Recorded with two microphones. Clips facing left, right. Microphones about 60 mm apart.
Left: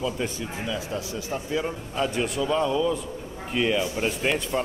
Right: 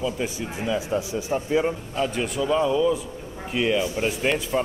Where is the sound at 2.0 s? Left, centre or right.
Centre.